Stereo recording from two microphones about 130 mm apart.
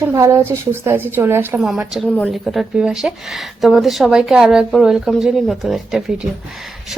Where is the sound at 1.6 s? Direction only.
5° right (ahead or behind).